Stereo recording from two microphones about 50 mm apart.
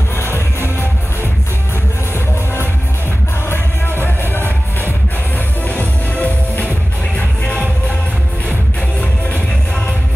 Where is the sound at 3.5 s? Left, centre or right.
Left.